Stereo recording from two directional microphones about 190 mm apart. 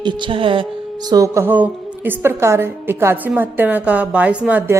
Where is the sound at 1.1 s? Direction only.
15° right (ahead or behind).